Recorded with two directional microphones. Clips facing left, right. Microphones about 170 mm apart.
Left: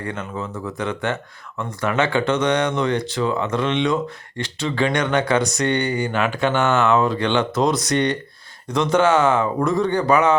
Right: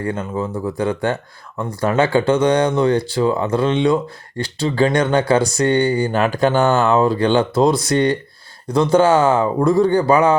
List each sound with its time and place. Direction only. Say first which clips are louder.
0.0 s speech: right 6 dB; 30° right (ahead or behind)